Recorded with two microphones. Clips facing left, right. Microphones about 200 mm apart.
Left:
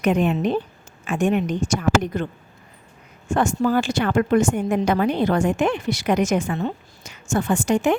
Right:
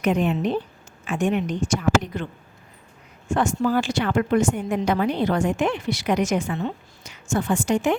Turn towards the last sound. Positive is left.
turn(degrees=50)  # may be behind; listen again after turning